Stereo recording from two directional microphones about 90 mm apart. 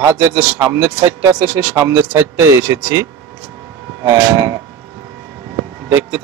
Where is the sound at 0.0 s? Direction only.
25° right (ahead or behind).